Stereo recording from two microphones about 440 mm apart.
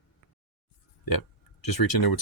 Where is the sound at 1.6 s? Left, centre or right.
Left.